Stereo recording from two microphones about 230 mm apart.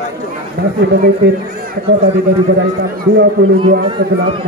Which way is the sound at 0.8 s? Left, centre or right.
Right.